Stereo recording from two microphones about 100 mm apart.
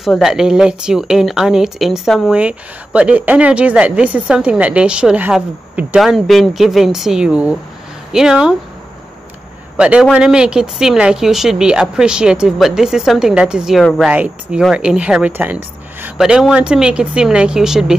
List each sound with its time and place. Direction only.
0.0 s a woman's voice: 5° right (ahead or behind)
2.3 s speech: 10° right (ahead or behind)
5.9 s a woman's voice: centre (ahead or behind)
9.8 s a man's voice: 10° right (ahead or behind)
16.2 s speech: 5° right (ahead or behind)